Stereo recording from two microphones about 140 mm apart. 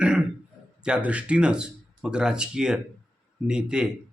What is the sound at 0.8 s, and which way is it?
Speech, 10° right (ahead or behind).